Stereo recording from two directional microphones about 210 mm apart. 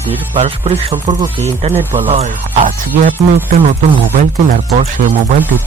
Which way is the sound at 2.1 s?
35° right (ahead or behind).